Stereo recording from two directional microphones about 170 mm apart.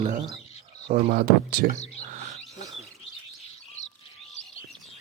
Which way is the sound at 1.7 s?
40° left (ahead or behind).